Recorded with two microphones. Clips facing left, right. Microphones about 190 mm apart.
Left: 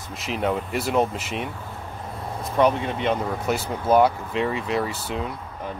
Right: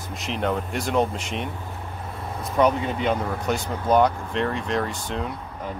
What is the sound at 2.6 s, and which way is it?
Speech, centre (ahead or behind).